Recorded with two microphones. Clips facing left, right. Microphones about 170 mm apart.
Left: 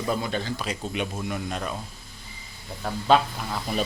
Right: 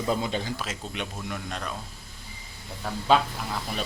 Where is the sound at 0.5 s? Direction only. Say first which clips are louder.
Left 4 dB; centre (ahead or behind).